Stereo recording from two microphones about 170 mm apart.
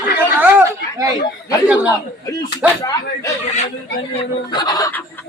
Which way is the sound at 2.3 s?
25° left (ahead or behind).